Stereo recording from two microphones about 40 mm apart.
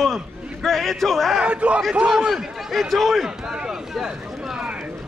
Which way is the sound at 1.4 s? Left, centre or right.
Right.